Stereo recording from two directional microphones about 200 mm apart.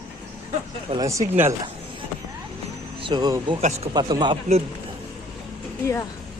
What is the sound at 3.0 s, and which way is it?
Speech, 20° right (ahead or behind).